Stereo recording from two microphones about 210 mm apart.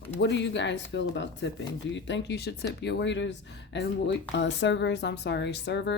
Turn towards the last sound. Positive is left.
turn(degrees=55)  # may be behind; listen again after turning